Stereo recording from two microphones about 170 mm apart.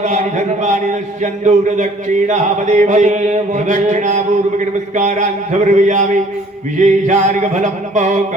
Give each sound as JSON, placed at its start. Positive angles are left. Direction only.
{"t": 0.0, "sound": "speech", "side_deg": -45}